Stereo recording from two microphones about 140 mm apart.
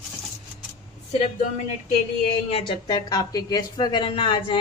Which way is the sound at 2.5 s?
35° left (ahead or behind).